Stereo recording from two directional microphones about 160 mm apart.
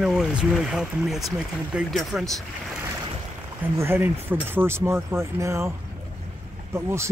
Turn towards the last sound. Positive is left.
turn(degrees=-15)  # may be behind; listen again after turning